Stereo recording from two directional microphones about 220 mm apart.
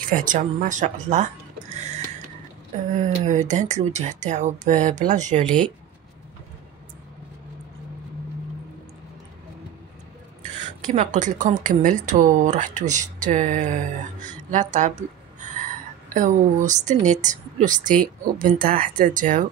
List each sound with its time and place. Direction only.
0.1 s speech: 35° right (ahead or behind)
10.4 s speech: 35° right (ahead or behind)
16.1 s speech: 35° right (ahead or behind)